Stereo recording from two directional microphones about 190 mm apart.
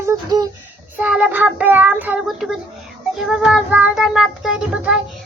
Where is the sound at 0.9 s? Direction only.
5° right (ahead or behind).